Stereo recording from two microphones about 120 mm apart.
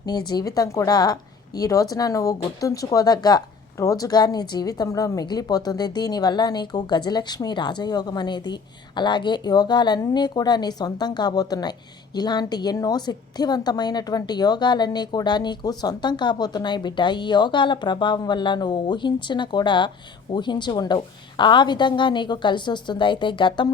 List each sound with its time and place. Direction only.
0.0 s a woman's voice: 35° left (ahead or behind)